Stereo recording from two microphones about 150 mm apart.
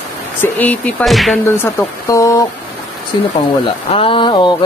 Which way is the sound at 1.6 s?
20° left (ahead or behind).